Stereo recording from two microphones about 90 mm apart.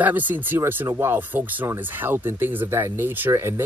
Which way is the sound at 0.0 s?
20° right (ahead or behind).